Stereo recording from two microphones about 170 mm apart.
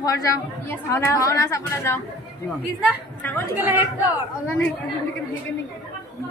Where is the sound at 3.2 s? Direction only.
10° left (ahead or behind).